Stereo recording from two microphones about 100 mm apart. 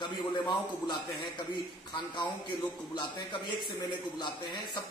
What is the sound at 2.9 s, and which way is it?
Speech, 45° left (ahead or behind).